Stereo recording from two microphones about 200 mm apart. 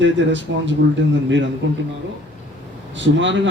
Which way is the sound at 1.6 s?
60° right (ahead or behind).